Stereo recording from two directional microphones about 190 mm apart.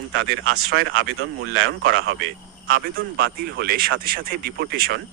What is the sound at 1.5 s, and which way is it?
Speech, 55° right (ahead or behind).